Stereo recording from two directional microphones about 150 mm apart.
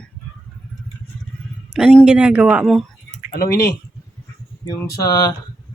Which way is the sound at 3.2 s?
90° left.